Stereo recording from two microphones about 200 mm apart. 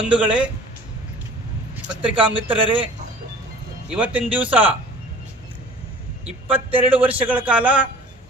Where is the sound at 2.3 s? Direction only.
25° right (ahead or behind).